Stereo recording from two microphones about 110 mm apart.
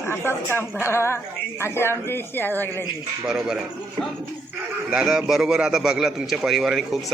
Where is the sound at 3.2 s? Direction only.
5° right (ahead or behind).